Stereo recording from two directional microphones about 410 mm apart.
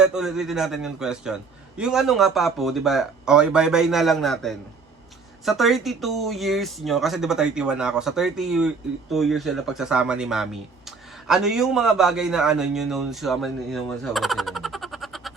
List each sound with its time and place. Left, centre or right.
0.0 s speech: centre